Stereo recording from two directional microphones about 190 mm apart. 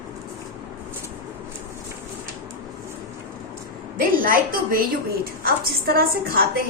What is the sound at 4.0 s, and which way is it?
A woman's voice, 50° right (ahead or behind).